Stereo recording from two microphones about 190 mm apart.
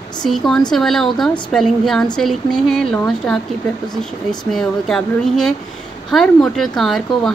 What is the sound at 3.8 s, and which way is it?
Speech, 20° left (ahead or behind).